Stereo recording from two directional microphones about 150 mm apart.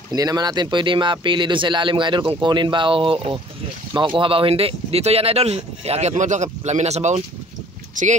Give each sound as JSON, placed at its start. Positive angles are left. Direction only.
{"t": 0.1, "sound": "speech", "side_deg": -25}